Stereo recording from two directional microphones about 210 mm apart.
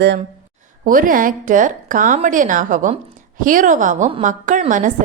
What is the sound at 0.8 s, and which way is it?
A woman's voice, 40° right (ahead or behind).